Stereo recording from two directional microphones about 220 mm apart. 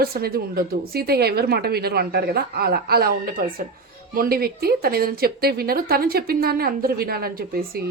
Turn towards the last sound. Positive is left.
turn(degrees=-45)  # may be behind; listen again after turning